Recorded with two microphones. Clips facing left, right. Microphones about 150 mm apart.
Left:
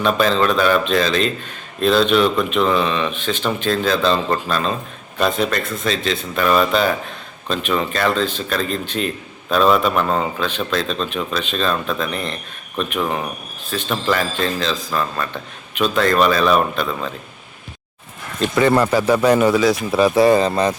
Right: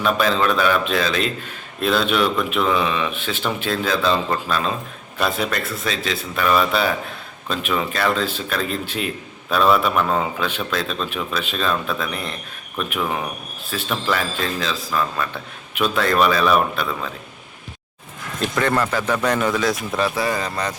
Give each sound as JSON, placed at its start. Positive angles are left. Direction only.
{"t": 0.0, "sound": "speech", "side_deg": -5}
{"t": 18.3, "sound": "a man's voice", "side_deg": 5}
{"t": 20.1, "sound": "speech", "side_deg": 30}